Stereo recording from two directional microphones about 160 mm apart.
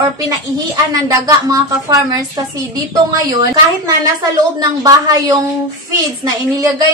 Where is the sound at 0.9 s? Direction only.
20° right (ahead or behind).